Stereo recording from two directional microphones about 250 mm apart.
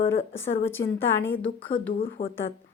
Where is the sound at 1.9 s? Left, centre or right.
Left.